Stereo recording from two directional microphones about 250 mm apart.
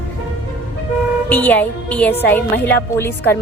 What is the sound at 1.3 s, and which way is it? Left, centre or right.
A woman's voice, centre.